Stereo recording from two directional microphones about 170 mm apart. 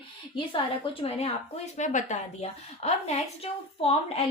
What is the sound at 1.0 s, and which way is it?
A woman's voice, 35° left (ahead or behind).